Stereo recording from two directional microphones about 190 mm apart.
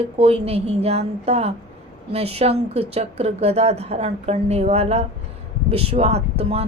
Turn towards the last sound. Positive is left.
turn(degrees=-30)  # may be behind; listen again after turning